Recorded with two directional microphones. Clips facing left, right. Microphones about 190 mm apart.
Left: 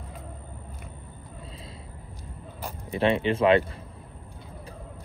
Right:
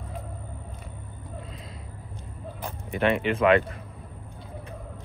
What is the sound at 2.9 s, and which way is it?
Speech, 30° left (ahead or behind).